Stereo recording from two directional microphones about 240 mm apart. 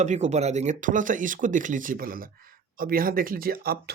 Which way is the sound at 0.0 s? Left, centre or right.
Right.